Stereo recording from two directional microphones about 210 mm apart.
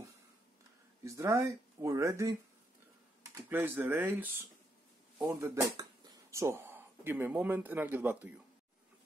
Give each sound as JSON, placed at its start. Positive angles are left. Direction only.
{"t": 1.0, "sound": "speech", "side_deg": -15}
{"t": 3.3, "sound": "speech", "side_deg": -10}